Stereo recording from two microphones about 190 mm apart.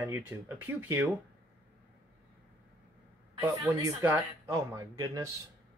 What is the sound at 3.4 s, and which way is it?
Speech, 10° right (ahead or behind).